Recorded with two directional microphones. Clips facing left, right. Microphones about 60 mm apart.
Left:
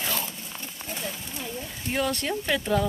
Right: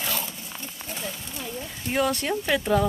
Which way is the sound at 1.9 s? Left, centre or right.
Centre.